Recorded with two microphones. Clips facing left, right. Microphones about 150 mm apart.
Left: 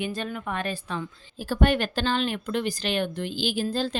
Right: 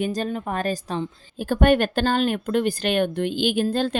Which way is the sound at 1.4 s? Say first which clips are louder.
Right 5 dB; 50° right (ahead or behind).